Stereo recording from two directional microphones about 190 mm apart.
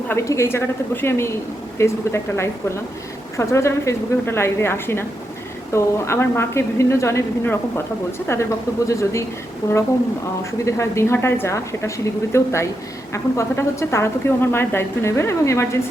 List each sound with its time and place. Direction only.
0.1 s speech: 15° left (ahead or behind)
1.8 s speech: 15° left (ahead or behind)